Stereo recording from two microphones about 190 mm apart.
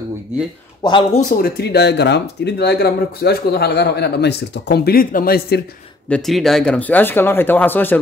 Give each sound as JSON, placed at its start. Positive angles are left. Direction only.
{"t": 0.8, "sound": "speech", "side_deg": 25}
{"t": 1.3, "sound": "speech", "side_deg": 55}
{"t": 6.0, "sound": "speech", "side_deg": 5}